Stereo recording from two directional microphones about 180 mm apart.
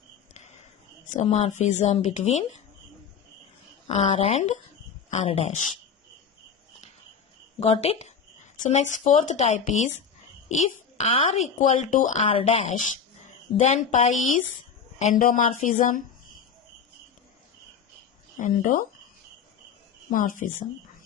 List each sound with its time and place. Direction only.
0.3 s a sound: 40° left (ahead or behind)
1.1 s a woman's voice: 35° left (ahead or behind)
3.8 s a woman's voice: 35° left (ahead or behind)
7.6 s a woman's voice: 35° left (ahead or behind)
12.2 s a woman's voice: 30° left (ahead or behind)
15.2 s speech: 45° left (ahead or behind)
18.3 s speech: 45° left (ahead or behind)
20.1 s speech: 45° left (ahead or behind)